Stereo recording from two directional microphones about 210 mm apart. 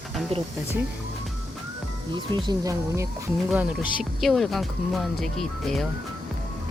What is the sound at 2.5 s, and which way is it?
Speech, 15° right (ahead or behind).